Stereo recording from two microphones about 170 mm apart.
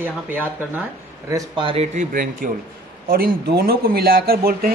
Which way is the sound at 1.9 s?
55° right (ahead or behind).